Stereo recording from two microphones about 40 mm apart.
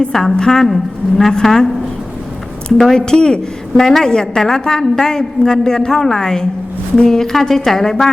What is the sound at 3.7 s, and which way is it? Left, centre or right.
A woman's voice, centre.